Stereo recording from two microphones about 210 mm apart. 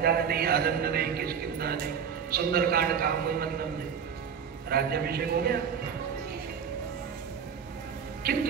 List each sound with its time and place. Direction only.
0.0 s a man's voice: 45° right (ahead or behind)
4.6 s a man's voice: 45° right (ahead or behind)
8.3 s a man's voice: 45° right (ahead or behind)